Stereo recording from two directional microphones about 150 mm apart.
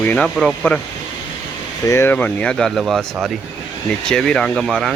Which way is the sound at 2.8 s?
5° right (ahead or behind).